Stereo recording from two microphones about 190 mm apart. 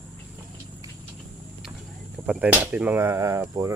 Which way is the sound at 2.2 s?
5° right (ahead or behind).